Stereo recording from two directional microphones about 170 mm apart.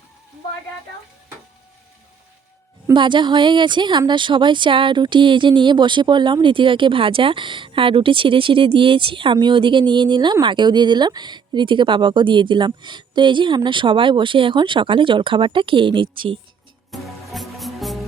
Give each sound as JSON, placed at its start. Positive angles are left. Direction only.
{"t": 2.8, "sound": "speech", "side_deg": -30}
{"t": 16.9, "sound": "music", "side_deg": 0}